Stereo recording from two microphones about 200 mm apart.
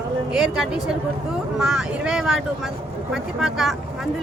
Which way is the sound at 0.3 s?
Centre (ahead or behind).